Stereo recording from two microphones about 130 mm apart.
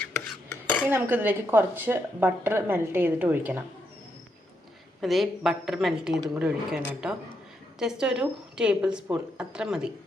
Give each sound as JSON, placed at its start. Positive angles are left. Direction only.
{"t": 0.9, "sound": "a woman's voice", "side_deg": -15}
{"t": 4.9, "sound": "a woman's voice", "side_deg": 0}